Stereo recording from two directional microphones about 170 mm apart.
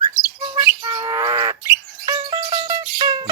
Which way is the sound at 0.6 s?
15° right (ahead or behind).